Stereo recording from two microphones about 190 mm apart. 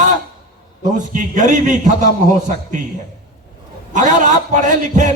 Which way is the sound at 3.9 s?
40° right (ahead or behind).